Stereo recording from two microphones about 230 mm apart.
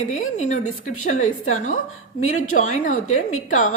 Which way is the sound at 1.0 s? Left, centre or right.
Left.